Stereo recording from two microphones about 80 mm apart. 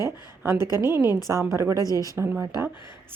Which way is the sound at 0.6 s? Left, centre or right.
Left.